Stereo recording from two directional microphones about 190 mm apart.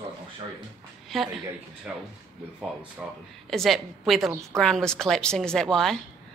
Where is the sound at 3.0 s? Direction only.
5° right (ahead or behind).